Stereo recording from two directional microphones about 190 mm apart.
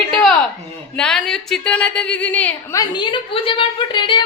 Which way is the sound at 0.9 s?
5° left (ahead or behind).